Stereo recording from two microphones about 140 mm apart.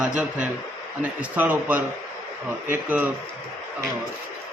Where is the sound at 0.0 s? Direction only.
5° right (ahead or behind).